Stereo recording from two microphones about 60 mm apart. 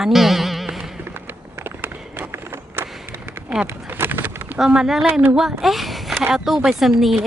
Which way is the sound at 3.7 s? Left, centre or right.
Right.